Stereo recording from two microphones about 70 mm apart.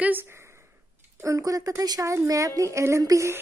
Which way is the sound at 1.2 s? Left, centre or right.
Right.